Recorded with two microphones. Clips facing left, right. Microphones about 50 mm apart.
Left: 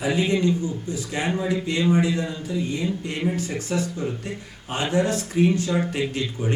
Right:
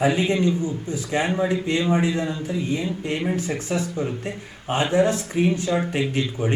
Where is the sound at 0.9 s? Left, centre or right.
Right.